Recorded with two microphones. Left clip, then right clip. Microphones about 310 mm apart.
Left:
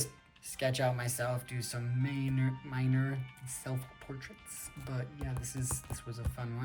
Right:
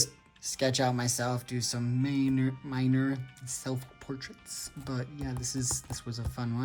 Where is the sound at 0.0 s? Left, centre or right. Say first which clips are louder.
Right 10 dB; centre.